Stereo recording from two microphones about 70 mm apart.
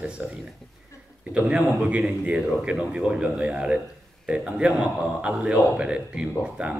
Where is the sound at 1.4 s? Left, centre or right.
Centre.